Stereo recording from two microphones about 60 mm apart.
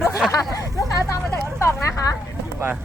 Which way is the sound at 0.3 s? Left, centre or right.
Left.